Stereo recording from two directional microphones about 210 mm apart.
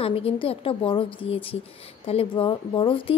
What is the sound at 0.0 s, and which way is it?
A woman's voice, 25° left (ahead or behind).